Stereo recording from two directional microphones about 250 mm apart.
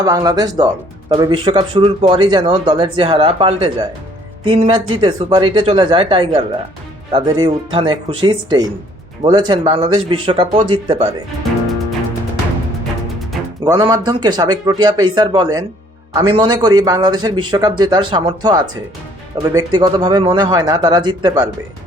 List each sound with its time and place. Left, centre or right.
0.0 s speech: centre
13.7 s speech: centre